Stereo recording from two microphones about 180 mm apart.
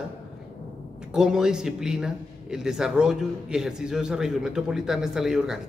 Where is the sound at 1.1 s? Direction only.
5° right (ahead or behind).